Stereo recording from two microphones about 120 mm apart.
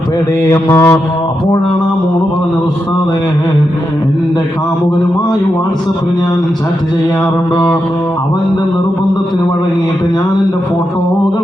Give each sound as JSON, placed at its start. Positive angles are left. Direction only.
{"t": 0.4, "sound": "mantra", "side_deg": 25}